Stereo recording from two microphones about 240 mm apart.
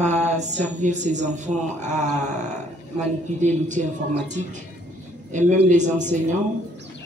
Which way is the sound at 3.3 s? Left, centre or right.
Right.